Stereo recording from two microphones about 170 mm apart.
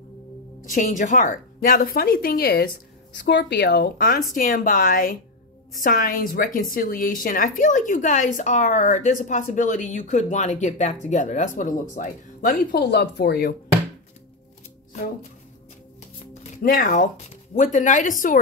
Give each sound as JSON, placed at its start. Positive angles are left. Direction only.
{"t": 0.6, "sound": "a woman's voice", "side_deg": 50}
{"t": 3.2, "sound": "speech", "side_deg": 90}
{"t": 4.3, "sound": "a woman's voice", "side_deg": 50}
{"t": 12.7, "sound": "speech", "side_deg": 70}
{"t": 16.6, "sound": "a woman's voice", "side_deg": 50}